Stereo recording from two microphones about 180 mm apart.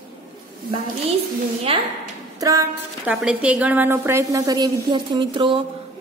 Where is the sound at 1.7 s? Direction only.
30° right (ahead or behind).